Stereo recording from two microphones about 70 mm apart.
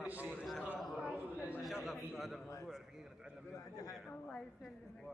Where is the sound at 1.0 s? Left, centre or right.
Right.